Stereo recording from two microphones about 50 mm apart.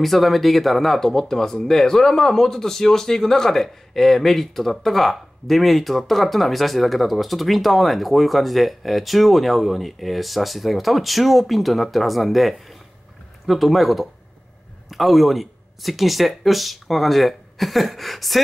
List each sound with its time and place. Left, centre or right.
0.0 s speech: centre